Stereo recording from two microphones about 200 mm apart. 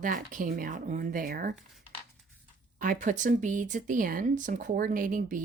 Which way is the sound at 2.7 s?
40° right (ahead or behind).